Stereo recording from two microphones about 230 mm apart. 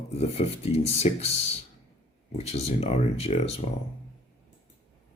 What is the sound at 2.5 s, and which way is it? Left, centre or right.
Speech, left.